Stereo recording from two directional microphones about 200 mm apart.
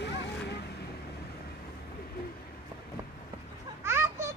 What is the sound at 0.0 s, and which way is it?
Vehicle, 55° left (ahead or behind).